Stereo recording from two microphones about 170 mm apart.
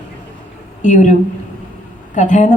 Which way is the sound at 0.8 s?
45° left (ahead or behind).